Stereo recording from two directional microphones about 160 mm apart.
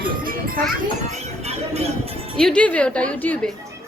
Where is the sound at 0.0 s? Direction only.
60° right (ahead or behind).